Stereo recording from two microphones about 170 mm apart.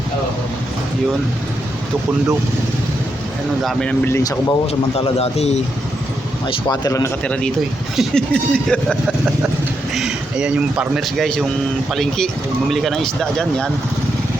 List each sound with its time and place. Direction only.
3.6 s speech: 5° left (ahead or behind)
4.2 s speech: 20° left (ahead or behind)
4.6 s speech: 35° left (ahead or behind)
6.5 s speech: 25° left (ahead or behind)
7.3 s speech: 5° left (ahead or behind)